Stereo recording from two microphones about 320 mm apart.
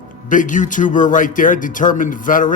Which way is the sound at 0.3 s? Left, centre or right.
Left.